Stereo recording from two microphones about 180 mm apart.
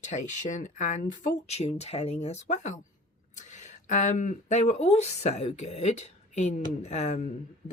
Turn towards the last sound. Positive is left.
turn(degrees=40)  # may be behind; listen again after turning